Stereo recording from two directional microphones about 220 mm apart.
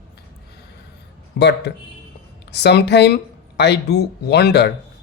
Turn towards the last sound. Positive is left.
turn(degrees=50)  # may be behind; listen again after turning